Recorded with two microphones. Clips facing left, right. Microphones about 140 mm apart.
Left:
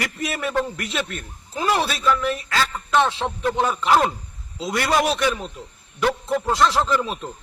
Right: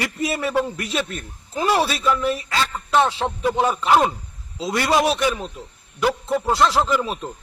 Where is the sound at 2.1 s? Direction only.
30° right (ahead or behind).